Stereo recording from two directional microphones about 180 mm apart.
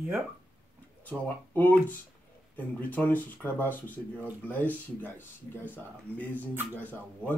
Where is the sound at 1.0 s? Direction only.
10° left (ahead or behind).